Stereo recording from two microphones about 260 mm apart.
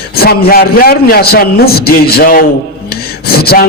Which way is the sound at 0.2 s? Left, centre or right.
Left.